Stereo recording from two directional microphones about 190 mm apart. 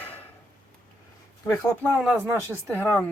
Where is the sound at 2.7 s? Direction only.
10° left (ahead or behind).